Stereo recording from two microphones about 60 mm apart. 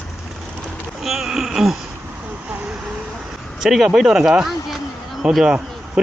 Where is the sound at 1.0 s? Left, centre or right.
Centre.